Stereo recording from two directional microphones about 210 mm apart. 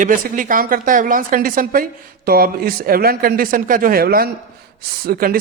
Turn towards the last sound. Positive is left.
turn(degrees=-45)  # may be behind; listen again after turning